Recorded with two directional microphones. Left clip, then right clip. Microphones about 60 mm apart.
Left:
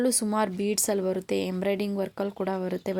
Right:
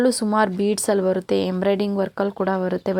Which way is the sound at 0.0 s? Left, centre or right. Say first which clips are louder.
Right 7 dB; centre.